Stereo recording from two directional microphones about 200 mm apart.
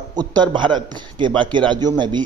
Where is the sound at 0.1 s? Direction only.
20° right (ahead or behind).